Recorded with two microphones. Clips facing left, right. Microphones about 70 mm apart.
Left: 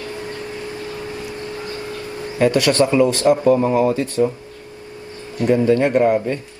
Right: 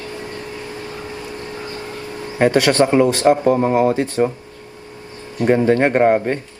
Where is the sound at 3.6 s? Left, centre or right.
Right.